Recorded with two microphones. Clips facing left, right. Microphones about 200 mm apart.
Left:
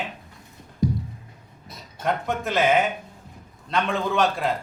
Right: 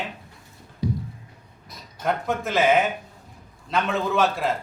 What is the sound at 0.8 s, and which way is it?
Music, 45° left (ahead or behind).